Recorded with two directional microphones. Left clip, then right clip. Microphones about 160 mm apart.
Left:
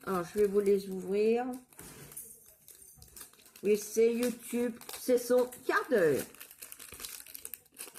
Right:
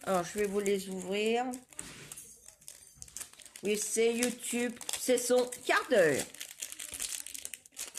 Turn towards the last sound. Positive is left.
turn(degrees=0)  # may be behind; listen again after turning